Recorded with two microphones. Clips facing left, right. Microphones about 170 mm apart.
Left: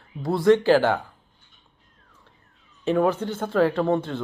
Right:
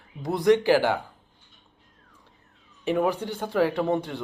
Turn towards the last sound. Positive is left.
turn(degrees=-15)  # may be behind; listen again after turning